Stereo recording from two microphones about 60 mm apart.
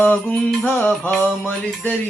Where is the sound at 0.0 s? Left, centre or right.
Left.